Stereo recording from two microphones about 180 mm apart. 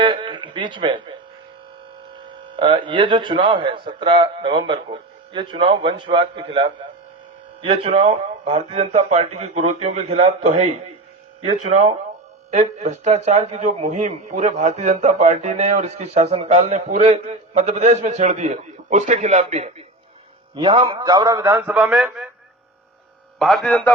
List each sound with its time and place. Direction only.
0.0 s speech: 30° right (ahead or behind)
2.6 s a man's voice: 30° right (ahead or behind)
20.6 s a man's voice: 25° right (ahead or behind); by 22.3 s 5° right (ahead or behind)
23.4 s a man's voice: centre (ahead or behind)